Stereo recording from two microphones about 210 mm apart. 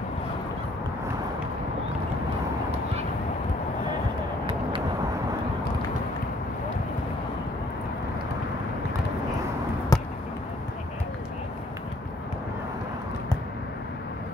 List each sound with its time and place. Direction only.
9.9 s basketball bounce: 15° left (ahead or behind)